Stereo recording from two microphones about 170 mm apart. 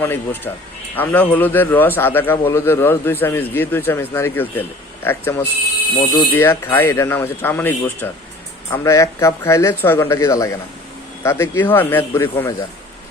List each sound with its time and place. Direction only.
0.0 s a man's voice: 10° left (ahead or behind)